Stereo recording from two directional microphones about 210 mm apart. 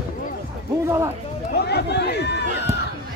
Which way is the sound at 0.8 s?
15° right (ahead or behind).